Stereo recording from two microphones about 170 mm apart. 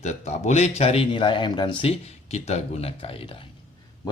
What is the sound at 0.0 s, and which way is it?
Speech, 40° left (ahead or behind).